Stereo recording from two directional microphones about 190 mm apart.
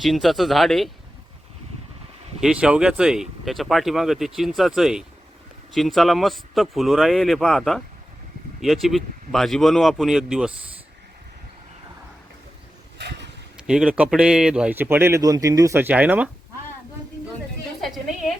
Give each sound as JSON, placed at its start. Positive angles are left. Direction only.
{"t": 0.0, "sound": "speech", "side_deg": 0}
{"t": 2.4, "sound": "speech", "side_deg": -5}
{"t": 13.0, "sound": "vehicle", "side_deg": -65}
{"t": 13.7, "sound": "speech", "side_deg": -5}
{"t": 17.7, "sound": "a sound", "side_deg": 0}